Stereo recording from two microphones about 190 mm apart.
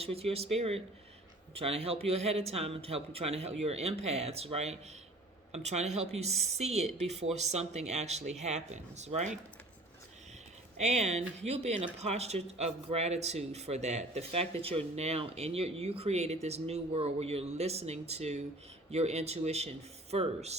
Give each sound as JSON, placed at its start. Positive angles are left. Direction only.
{"t": 0.0, "sound": "speech", "side_deg": -30}
{"t": 10.8, "sound": "speech", "side_deg": -35}